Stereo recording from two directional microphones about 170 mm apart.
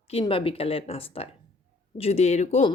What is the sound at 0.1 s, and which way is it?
Speech, 35° left (ahead or behind).